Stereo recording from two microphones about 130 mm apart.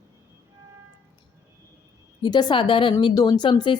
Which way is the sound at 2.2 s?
35° left (ahead or behind).